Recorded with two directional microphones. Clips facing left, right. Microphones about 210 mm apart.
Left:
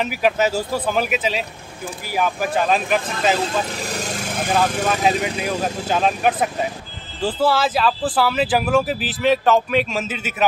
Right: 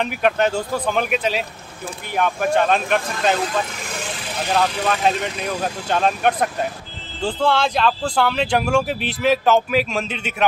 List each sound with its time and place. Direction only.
0.0 s speech: 5° left (ahead or behind)
3.8 s vehicle: 40° left (ahead or behind)
4.8 s speech: 5° left (ahead or behind)